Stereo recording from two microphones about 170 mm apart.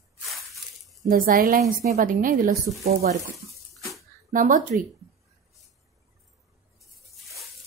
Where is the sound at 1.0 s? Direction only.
55° right (ahead or behind).